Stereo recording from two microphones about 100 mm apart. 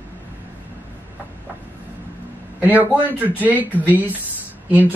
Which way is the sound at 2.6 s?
15° right (ahead or behind).